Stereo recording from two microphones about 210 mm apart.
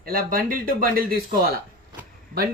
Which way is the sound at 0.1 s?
45° right (ahead or behind).